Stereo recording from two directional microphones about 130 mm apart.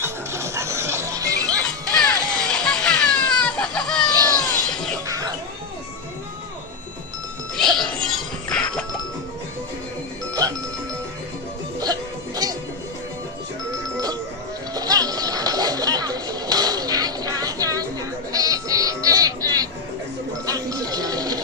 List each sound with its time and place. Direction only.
0.0 s music: 20° right (ahead or behind)
1.7 s music: 5° left (ahead or behind)
2.2 s children playing: 5° left (ahead or behind)
4.4 s music: 5° left (ahead or behind)
5.0 s music: 25° right (ahead or behind)
7.5 s music: 5° left (ahead or behind)
10.4 s music: 30° right (ahead or behind)
11.8 s music: 30° right (ahead or behind)
13.7 s music: 25° right (ahead or behind)
18.3 s sheep: 30° right (ahead or behind)
20.4 s music: 30° right (ahead or behind)